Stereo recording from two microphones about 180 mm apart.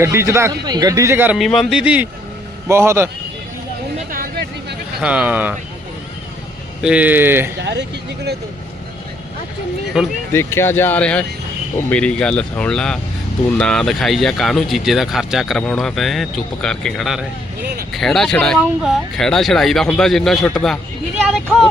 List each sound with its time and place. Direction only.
0.0 s speech: 15° right (ahead or behind)
1.4 s speech: centre (ahead or behind)
4.1 s a sound: 60° right (ahead or behind)
4.9 s speech: 5° right (ahead or behind)
6.8 s speech: 10° right (ahead or behind)
7.6 s speech: 70° right (ahead or behind)
10.0 s speech: centre (ahead or behind)
10.3 s speech: 15° left (ahead or behind)